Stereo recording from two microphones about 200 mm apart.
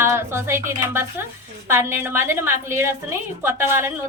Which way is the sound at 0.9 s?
10° right (ahead or behind).